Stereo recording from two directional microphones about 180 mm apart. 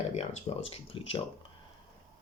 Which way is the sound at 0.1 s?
40° left (ahead or behind).